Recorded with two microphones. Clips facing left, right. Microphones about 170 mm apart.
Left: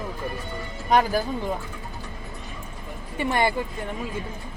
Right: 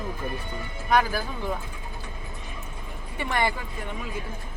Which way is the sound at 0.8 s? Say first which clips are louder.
Left 3 dB; 20° left (ahead or behind).